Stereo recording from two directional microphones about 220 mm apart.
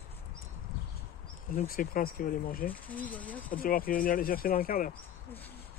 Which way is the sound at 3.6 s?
40° left (ahead or behind).